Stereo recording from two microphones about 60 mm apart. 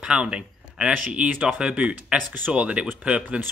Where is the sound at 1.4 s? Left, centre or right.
Centre.